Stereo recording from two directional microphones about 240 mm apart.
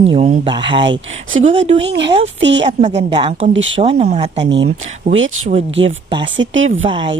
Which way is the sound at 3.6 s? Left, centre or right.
Right.